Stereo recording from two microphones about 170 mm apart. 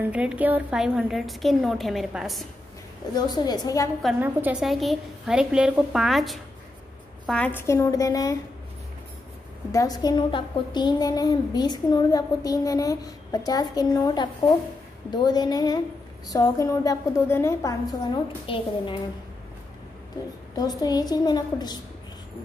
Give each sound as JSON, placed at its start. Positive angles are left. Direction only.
{"t": 0.0, "sound": "a woman's voice", "side_deg": -10}
{"t": 3.2, "sound": "a woman's voice", "side_deg": 25}
{"t": 4.2, "sound": "a woman's voice", "side_deg": -10}
{"t": 9.7, "sound": "a woman's voice", "side_deg": 20}
{"t": 18.5, "sound": "a woman's voice", "side_deg": 30}
{"t": 20.5, "sound": "a woman's voice", "side_deg": 25}